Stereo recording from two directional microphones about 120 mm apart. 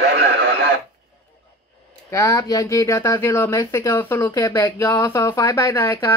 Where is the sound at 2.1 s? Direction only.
25° left (ahead or behind).